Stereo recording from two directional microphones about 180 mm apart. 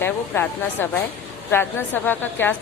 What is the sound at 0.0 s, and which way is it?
A woman's voice, 10° left (ahead or behind).